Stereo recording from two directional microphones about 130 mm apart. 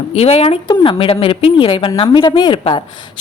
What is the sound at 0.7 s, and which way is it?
A woman's voice, 40° left (ahead or behind).